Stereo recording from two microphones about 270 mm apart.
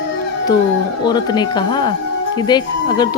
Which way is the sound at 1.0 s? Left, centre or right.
Centre.